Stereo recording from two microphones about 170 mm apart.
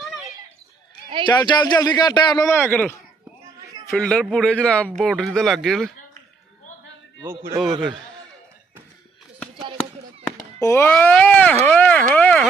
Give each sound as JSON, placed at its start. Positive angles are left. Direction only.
{"t": 1.2, "sound": "a man's voice", "side_deg": 25}
{"t": 7.2, "sound": "a man's voice", "side_deg": -15}
{"t": 10.6, "sound": "speech", "side_deg": 15}